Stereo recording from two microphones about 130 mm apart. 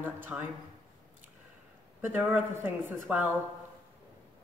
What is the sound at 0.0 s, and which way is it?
Speech, 15° right (ahead or behind).